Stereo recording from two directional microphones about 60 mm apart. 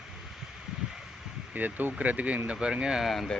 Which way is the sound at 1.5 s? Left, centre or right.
Right.